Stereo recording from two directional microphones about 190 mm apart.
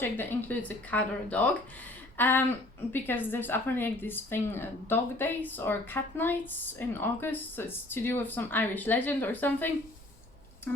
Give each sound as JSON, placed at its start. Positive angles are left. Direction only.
{"t": 0.0, "sound": "a woman's voice", "side_deg": 10}